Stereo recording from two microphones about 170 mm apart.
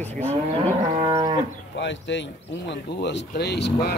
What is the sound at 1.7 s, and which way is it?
Speech, 90° left.